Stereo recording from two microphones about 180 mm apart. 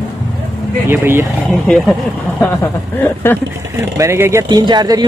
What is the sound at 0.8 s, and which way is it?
Speech, 15° right (ahead or behind).